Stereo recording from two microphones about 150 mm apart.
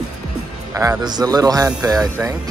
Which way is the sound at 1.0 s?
25° right (ahead or behind).